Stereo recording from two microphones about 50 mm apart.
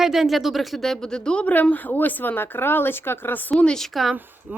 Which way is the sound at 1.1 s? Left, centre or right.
Centre.